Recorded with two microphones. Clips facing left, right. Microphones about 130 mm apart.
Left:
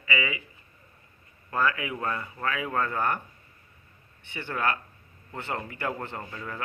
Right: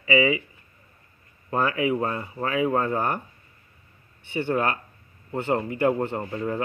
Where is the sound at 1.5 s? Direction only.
25° right (ahead or behind).